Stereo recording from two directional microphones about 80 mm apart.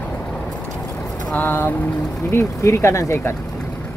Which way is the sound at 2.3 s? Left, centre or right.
Left.